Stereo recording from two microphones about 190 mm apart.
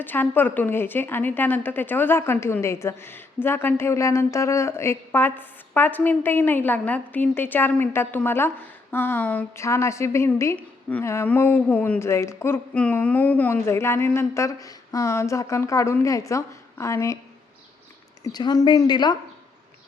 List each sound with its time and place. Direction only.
0.0 s a woman's voice: 10° left (ahead or behind)
18.2 s speech: 20° left (ahead or behind)